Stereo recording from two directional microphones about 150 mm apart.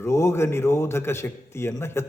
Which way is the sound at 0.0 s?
20° left (ahead or behind).